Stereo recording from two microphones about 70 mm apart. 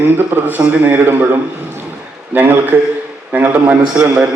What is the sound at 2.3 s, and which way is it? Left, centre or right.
A man's voice, right.